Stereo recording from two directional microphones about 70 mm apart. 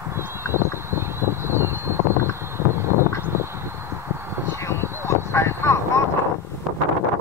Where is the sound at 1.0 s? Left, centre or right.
Right.